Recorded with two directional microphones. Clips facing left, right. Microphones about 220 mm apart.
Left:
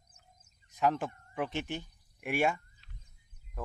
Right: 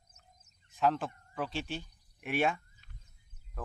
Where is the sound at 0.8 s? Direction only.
10° left (ahead or behind).